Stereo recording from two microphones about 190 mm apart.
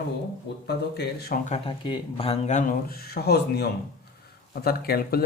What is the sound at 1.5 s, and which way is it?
Speech, 25° left (ahead or behind).